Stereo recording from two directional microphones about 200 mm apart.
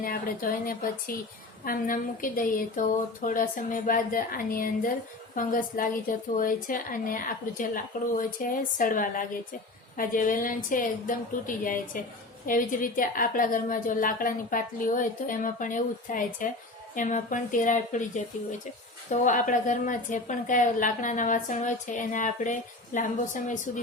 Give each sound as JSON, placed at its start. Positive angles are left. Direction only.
{"t": 0.0, "sound": "a woman's voice", "side_deg": 45}
{"t": 19.2, "sound": "a woman's voice", "side_deg": 40}